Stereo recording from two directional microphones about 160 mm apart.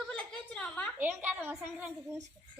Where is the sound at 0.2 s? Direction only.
5° left (ahead or behind).